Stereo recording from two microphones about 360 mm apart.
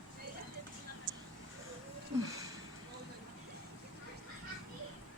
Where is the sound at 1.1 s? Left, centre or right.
Right.